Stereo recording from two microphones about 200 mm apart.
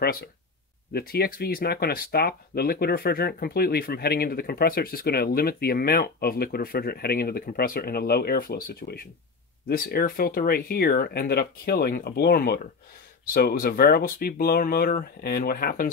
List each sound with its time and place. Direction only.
0.0 s speech: 50° left (ahead or behind)